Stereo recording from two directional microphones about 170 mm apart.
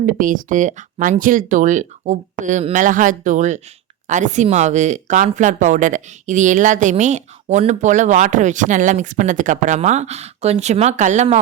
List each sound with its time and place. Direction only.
0.0 s speech: 50° right (ahead or behind)